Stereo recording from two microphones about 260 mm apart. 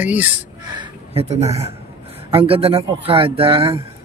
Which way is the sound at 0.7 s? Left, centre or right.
Right.